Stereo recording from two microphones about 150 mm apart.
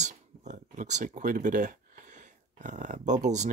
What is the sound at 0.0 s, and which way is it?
Speech, 50° right (ahead or behind).